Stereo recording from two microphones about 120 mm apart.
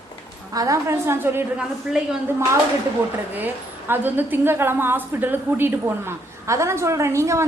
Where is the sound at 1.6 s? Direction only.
5° right (ahead or behind).